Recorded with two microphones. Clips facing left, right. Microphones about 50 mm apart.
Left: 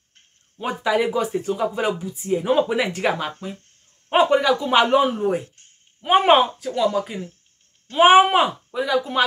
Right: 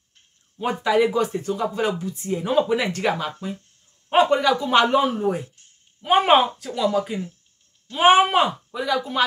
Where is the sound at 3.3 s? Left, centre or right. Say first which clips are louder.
Right 2 dB; left.